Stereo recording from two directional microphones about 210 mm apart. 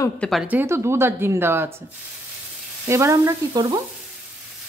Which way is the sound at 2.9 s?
15° right (ahead or behind).